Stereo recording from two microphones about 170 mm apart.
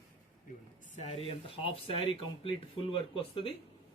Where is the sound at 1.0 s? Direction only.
35° left (ahead or behind).